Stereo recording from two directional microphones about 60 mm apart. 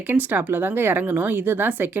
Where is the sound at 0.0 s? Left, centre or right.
Right.